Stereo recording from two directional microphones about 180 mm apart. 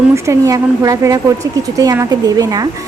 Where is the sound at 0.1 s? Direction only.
15° right (ahead or behind).